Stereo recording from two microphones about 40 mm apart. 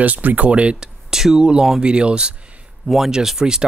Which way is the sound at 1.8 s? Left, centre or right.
Right.